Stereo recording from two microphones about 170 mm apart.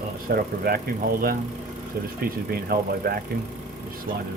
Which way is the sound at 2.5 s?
65° right (ahead or behind).